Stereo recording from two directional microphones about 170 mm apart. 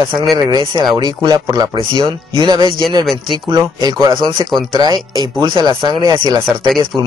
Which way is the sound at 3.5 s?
30° right (ahead or behind).